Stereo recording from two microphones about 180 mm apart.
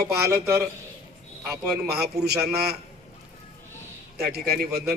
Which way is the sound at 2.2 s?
60° right (ahead or behind).